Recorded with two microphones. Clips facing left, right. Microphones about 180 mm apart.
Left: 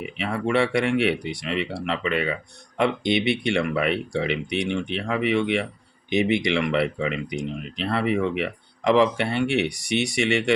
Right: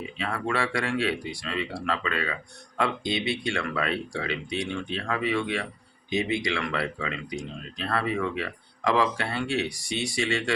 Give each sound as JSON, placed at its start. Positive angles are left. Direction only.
{"t": 0.2, "sound": "speech", "side_deg": 25}